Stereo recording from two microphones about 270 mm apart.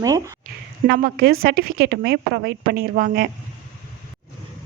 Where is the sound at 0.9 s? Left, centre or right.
Right.